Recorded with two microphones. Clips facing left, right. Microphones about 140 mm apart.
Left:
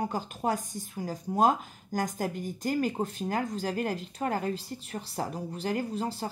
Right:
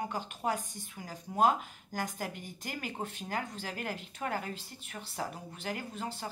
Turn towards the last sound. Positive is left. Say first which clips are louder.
# left 8 dB
turn(degrees=35)  # may be behind; listen again after turning